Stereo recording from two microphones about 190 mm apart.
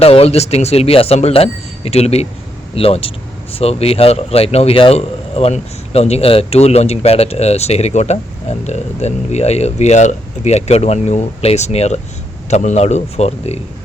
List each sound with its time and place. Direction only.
0.0 s a man's voice: 30° left (ahead or behind)